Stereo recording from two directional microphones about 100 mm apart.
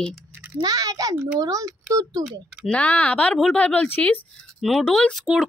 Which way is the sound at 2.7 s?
15° left (ahead or behind).